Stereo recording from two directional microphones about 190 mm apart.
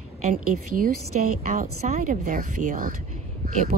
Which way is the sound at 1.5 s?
40° right (ahead or behind).